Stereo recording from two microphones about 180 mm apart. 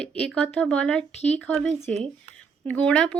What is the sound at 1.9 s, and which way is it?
Speech, 35° right (ahead or behind).